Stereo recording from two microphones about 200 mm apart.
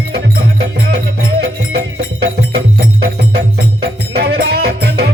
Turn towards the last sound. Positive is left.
turn(degrees=-50)  # may be behind; listen again after turning